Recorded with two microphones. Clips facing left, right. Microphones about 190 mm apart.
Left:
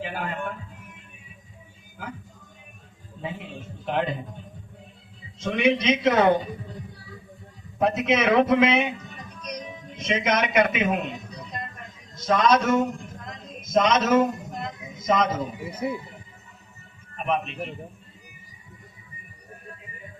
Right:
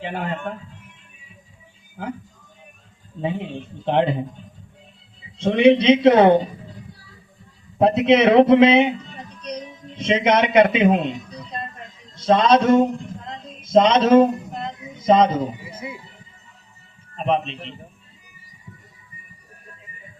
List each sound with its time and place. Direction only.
0.0 s speech: 25° right (ahead or behind)
3.2 s a man's voice: 35° right (ahead or behind)
5.4 s a man's voice: 30° right (ahead or behind)
7.8 s speech: 30° right (ahead or behind)
12.1 s a sound: 30° right (ahead or behind)
17.2 s speech: 30° right (ahead or behind)